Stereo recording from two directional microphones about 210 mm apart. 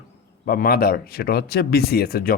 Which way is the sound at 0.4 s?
45° left (ahead or behind).